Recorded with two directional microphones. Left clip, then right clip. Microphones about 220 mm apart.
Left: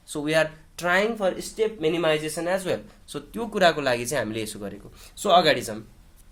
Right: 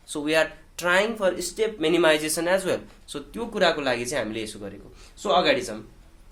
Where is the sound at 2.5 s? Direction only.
15° left (ahead or behind).